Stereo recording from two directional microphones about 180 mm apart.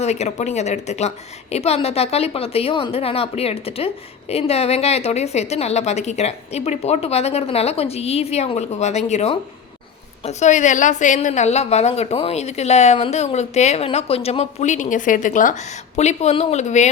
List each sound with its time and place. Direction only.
0.0 s a woman's voice: 40° left (ahead or behind)